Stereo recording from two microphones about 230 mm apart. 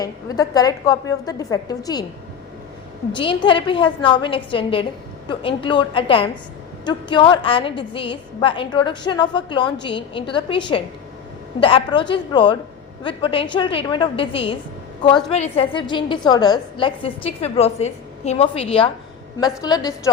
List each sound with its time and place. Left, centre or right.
0.0 s a woman's voice: centre
3.2 s a woman's voice: left